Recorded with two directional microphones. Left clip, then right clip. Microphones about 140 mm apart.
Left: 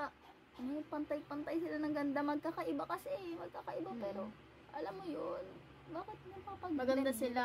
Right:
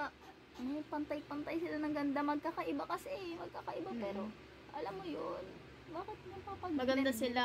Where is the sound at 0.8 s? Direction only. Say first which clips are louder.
Even; 20° left (ahead or behind).